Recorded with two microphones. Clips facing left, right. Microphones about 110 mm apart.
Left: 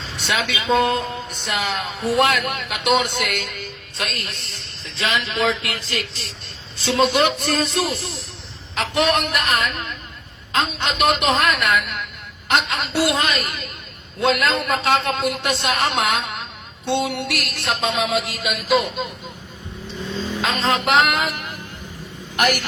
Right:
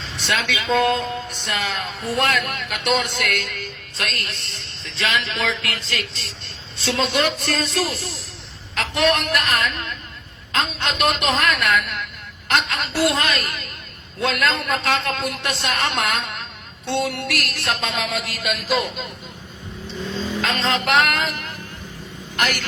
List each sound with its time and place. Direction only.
0.0 s a woman's voice: centre (ahead or behind)
20.4 s music: centre (ahead or behind)
22.4 s a woman's voice: 15° left (ahead or behind)